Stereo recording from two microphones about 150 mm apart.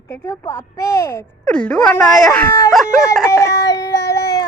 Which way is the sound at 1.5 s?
5° left (ahead or behind).